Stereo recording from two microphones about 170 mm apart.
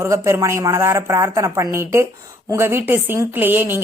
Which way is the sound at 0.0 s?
20° right (ahead or behind).